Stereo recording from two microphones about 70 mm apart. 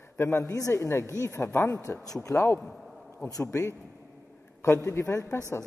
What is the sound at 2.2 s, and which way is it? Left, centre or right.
Speech, left.